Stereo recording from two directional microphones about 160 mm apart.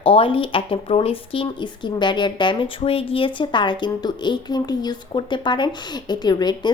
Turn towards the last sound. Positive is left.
turn(degrees=25)  # may be behind; listen again after turning